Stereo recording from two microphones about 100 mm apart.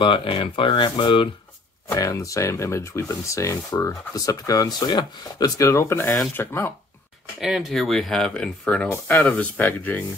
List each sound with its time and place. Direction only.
0.0 s speech: 55° left (ahead or behind)
2.0 s speech: 35° left (ahead or behind)
7.3 s speech: 5° right (ahead or behind); by 10.0 s 15° left (ahead or behind)